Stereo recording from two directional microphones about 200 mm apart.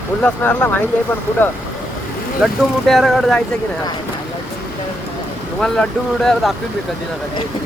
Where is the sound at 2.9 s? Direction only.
Centre (ahead or behind).